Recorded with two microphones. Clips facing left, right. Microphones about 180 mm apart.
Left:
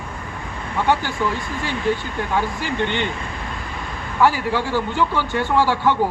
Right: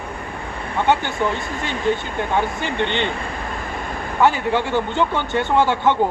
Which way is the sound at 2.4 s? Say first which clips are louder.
Even; 25° right (ahead or behind).